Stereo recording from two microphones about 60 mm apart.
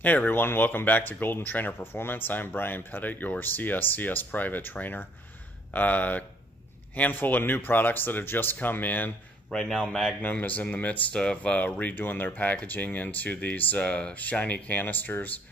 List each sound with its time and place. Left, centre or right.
0.0 s speech: left
9.5 s a man's voice: centre
10.4 s speech: left